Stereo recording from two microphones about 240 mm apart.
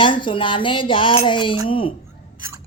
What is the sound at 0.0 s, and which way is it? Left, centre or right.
Speech, left.